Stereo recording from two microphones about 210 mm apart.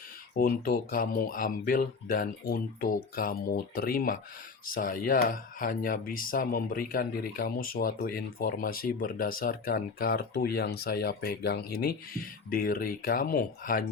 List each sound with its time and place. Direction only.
0.3 s speech: 45° left (ahead or behind)